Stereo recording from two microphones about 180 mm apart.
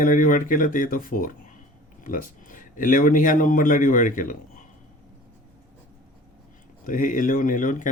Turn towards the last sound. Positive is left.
turn(degrees=45)  # may be behind; listen again after turning